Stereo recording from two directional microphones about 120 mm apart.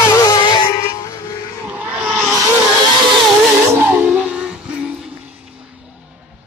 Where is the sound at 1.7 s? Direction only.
10° right (ahead or behind).